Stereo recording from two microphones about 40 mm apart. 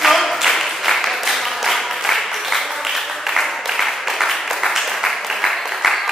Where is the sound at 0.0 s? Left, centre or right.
Centre.